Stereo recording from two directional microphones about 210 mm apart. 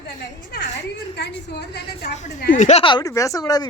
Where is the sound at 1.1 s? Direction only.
55° left (ahead or behind).